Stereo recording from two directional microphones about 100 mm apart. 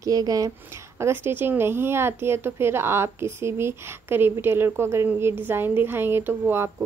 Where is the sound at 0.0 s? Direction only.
40° right (ahead or behind).